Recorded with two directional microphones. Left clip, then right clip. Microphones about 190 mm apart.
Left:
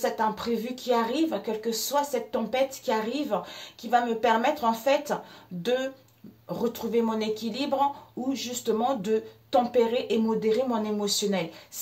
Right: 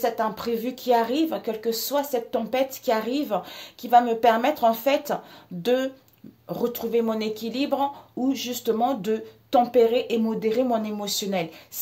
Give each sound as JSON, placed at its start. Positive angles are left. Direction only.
{"t": 0.0, "sound": "a woman's voice", "side_deg": -50}